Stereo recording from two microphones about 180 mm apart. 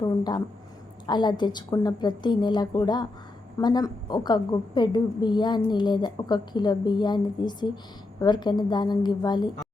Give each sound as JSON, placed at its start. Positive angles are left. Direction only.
{"t": 0.0, "sound": "a woman's voice", "side_deg": 25}